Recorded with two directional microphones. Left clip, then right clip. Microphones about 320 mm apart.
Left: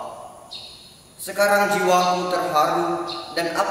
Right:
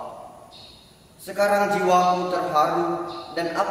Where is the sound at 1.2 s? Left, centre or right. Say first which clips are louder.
Left 2 dB; centre.